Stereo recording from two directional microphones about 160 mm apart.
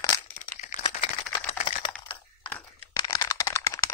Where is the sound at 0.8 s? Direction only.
25° left (ahead or behind).